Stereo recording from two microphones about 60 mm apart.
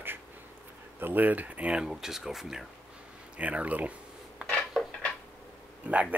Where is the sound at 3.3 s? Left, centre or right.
Right.